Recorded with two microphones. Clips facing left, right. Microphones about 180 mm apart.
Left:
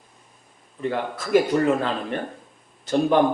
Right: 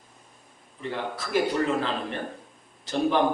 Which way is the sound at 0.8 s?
50° left (ahead or behind).